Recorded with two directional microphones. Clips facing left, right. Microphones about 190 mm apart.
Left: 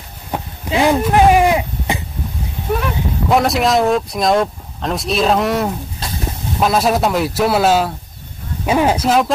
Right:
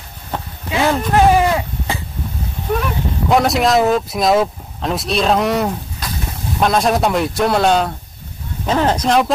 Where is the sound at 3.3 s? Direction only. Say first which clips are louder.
Even; centre (ahead or behind).